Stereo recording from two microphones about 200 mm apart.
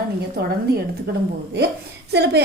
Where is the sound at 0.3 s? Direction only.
50° right (ahead or behind).